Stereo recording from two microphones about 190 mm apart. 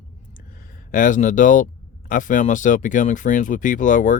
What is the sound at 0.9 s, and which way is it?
Speech, 45° left (ahead or behind).